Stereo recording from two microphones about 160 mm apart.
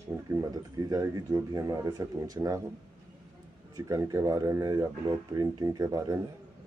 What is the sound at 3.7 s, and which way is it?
Speech, 20° right (ahead or behind).